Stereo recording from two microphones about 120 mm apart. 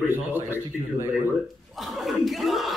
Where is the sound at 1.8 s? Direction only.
Centre (ahead or behind).